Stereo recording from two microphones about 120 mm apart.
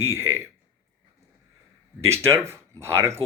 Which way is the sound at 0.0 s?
20° right (ahead or behind).